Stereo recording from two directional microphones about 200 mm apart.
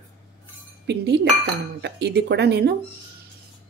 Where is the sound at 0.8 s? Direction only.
55° right (ahead or behind).